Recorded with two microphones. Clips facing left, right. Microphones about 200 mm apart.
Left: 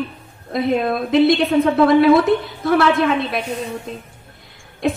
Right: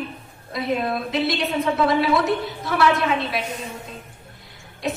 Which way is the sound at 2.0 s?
50° left (ahead or behind).